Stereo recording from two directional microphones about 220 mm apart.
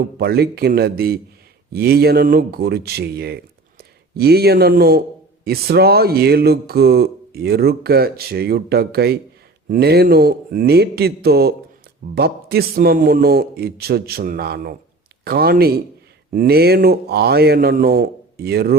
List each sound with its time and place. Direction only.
0.2 s speech: 45° right (ahead or behind)